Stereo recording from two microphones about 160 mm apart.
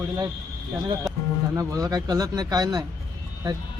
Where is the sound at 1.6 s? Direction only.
20° right (ahead or behind).